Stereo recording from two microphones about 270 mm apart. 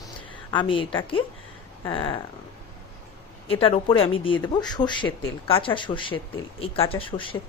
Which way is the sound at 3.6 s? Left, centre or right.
Centre.